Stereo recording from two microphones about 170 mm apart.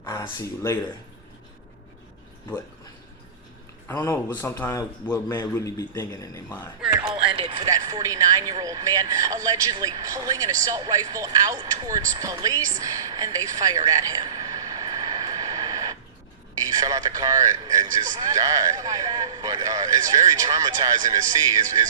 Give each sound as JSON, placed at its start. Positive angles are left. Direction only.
{"t": 0.0, "sound": "speech", "side_deg": 20}
{"t": 3.8, "sound": "a man's voice", "side_deg": 20}
{"t": 7.3, "sound": "speech", "side_deg": -30}
{"t": 13.6, "sound": "a sound", "side_deg": -20}
{"t": 16.6, "sound": "a man's voice", "side_deg": -20}